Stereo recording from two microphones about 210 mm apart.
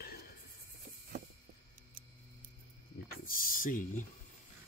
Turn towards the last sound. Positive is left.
turn(degrees=40)  # may be behind; listen again after turning